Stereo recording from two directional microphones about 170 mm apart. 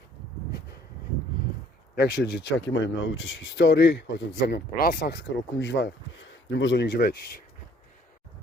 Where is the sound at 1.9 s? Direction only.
70° left (ahead or behind).